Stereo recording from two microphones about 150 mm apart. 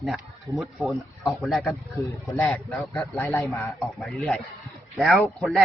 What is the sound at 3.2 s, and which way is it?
Speech, 20° left (ahead or behind).